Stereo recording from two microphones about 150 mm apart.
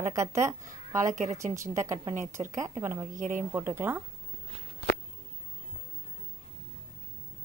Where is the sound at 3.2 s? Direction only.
60° right (ahead or behind).